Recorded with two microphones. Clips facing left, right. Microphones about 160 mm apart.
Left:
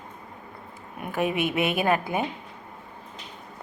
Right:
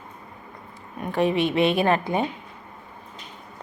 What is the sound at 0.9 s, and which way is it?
A woman's voice, 10° left (ahead or behind).